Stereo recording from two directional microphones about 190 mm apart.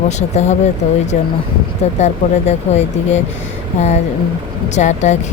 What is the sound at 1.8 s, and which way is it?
Speech, 35° left (ahead or behind).